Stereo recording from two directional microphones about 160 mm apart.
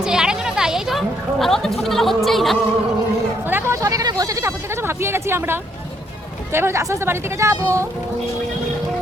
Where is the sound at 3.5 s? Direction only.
20° right (ahead or behind).